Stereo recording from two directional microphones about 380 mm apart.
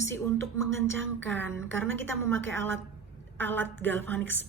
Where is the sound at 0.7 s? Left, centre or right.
Right.